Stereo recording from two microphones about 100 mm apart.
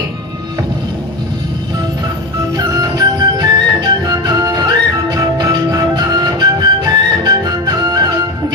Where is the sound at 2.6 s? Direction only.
40° right (ahead or behind).